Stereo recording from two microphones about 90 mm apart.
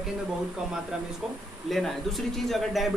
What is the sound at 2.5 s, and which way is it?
Speech, centre (ahead or behind).